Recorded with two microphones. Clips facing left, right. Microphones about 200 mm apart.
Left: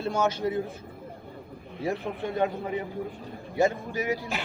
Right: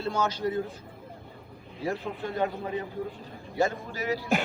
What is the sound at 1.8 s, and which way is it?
A man's voice, 20° left (ahead or behind).